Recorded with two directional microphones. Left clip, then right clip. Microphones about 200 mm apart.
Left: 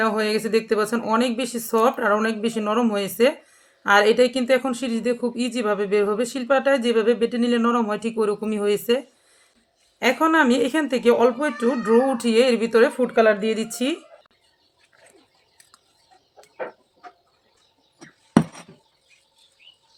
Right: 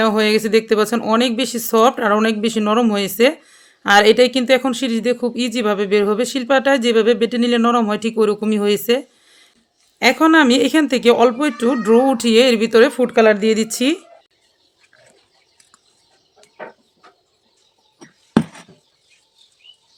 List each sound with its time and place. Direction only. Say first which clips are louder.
0.0 s speech: right 6 dB; 50° right (ahead or behind)